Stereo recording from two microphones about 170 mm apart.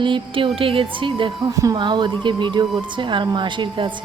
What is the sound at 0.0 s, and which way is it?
A woman's voice, 30° right (ahead or behind).